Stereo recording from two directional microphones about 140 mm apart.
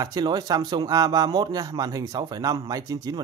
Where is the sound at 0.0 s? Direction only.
25° right (ahead or behind).